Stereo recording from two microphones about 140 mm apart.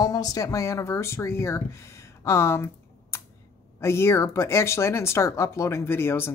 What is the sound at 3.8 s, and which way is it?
Speech, 20° left (ahead or behind).